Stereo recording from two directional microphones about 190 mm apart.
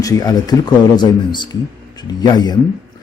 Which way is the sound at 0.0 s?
20° left (ahead or behind).